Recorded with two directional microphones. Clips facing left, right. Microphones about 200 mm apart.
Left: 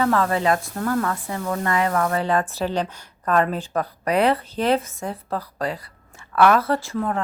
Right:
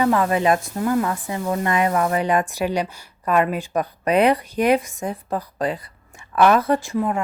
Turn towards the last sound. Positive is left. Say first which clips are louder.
# right 3 dB
turn(degrees=-15)  # may be behind; listen again after turning